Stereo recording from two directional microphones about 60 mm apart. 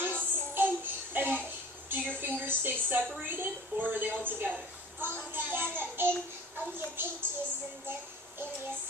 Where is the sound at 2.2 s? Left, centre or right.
Right.